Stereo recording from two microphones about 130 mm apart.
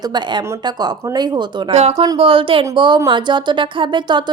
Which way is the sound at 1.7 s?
55° right (ahead or behind).